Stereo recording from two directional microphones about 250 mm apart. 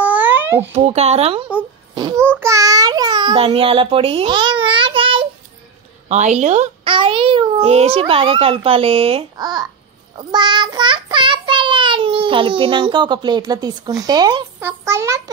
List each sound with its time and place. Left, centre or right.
0.0 s babbling: centre
0.7 s a child's voice: right
2.0 s babbling: centre
2.3 s a child's voice: centre
10.1 s child singing: centre